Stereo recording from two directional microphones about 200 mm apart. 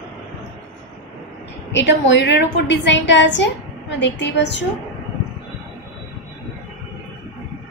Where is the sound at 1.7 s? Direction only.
65° left (ahead or behind).